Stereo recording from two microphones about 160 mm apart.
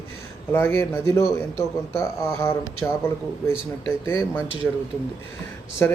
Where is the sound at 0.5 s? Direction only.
15° left (ahead or behind).